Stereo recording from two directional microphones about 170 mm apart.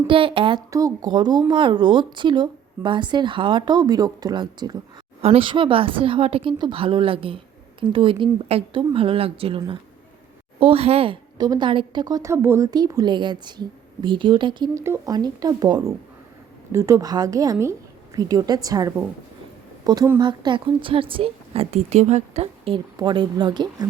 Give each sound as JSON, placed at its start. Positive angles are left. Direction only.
{"t": 0.1, "sound": "a woman's voice", "side_deg": -30}
{"t": 0.7, "sound": "a woman's voice", "side_deg": -20}